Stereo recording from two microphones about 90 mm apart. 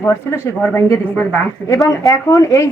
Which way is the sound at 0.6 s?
20° left (ahead or behind).